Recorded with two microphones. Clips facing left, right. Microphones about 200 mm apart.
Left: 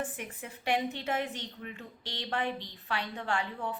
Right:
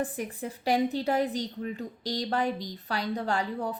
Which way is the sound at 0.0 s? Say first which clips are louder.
Right 6 dB; 35° right (ahead or behind).